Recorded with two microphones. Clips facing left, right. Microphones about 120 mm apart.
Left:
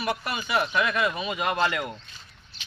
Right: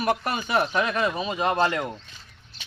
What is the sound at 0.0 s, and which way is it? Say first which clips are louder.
Speech: right 4 dB; 45° right (ahead or behind).